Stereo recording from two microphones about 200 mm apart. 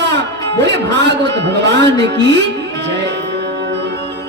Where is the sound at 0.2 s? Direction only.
60° right (ahead or behind).